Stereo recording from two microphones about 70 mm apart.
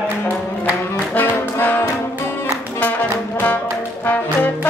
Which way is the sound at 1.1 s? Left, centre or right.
Left.